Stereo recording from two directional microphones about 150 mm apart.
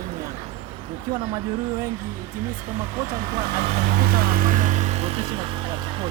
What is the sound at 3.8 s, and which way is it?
Speech, 85° right.